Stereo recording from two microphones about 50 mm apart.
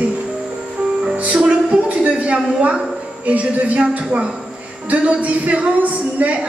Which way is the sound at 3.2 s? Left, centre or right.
Right.